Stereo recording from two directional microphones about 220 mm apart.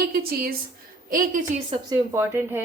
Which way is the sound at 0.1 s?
45° right (ahead or behind).